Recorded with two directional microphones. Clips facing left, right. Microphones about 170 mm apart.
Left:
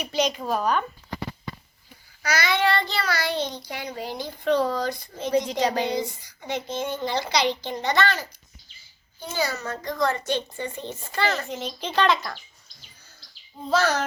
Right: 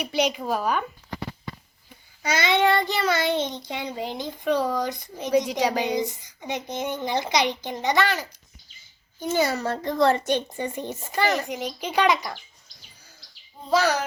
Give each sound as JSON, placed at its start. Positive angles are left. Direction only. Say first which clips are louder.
{"t": 0.0, "sound": "a woman's voice", "louder": "right 1 dB", "side_deg": -10}
{"t": 2.2, "sound": "a child's voice", "louder": "right 2 dB", "side_deg": -25}
{"t": 9.4, "sound": "a child's voice", "louder": "right 2 dB", "side_deg": -30}
{"t": 10.2, "sound": "a woman's voice", "louder": "right 2 dB", "side_deg": -15}
{"t": 13.7, "sound": "a woman's voice", "louder": "right 1 dB", "side_deg": -10}